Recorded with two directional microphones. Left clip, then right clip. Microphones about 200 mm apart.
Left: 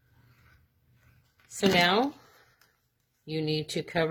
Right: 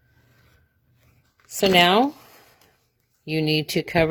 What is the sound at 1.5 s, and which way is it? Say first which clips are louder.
Speech: right 7 dB; 40° right (ahead or behind).